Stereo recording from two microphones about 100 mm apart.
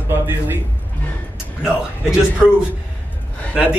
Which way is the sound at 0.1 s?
20° right (ahead or behind).